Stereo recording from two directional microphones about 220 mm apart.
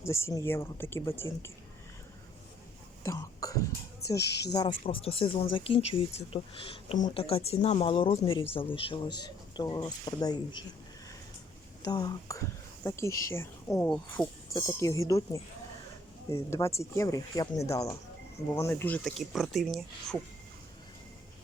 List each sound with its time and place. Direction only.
0.0 s speech: 10° left (ahead or behind)
3.0 s speech: 15° left (ahead or behind)
3.7 s speech: 45° left (ahead or behind)
4.9 s speech: 25° left (ahead or behind)
11.9 s speech: 15° left (ahead or behind); by 20.1 s centre (ahead or behind)